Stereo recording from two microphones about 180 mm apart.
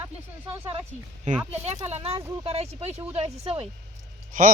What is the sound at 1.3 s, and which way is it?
Speech, 40° right (ahead or behind).